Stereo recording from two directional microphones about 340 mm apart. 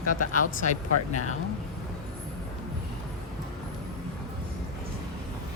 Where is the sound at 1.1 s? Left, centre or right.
Left.